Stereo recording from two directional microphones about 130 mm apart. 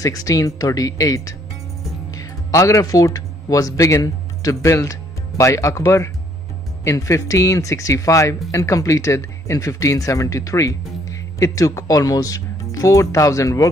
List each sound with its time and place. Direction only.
0.0 s speech: 25° left (ahead or behind)